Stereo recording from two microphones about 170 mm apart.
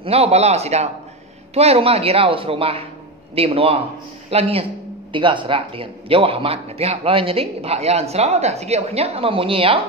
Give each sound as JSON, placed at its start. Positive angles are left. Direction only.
{"t": 0.0, "sound": "a man's voice", "side_deg": -35}